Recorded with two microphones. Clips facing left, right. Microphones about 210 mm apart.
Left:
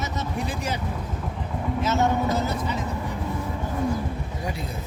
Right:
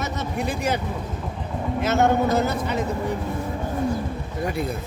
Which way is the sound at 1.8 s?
60° right (ahead or behind).